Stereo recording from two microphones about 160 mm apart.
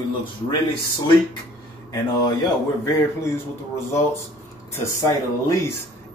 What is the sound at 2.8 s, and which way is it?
Speech, 15° left (ahead or behind).